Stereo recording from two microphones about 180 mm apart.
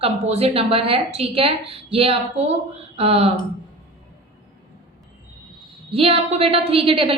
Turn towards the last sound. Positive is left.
turn(degrees=-30)  # may be behind; listen again after turning